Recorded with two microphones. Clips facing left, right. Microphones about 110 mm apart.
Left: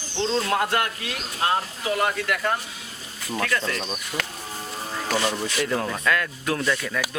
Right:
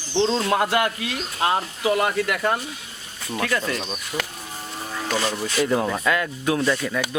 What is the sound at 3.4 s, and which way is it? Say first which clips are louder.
Speech: right 2 dB; 15° right (ahead or behind).